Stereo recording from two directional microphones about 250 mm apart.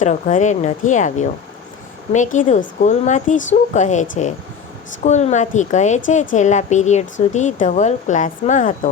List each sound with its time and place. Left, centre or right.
0.0 s a woman's voice: left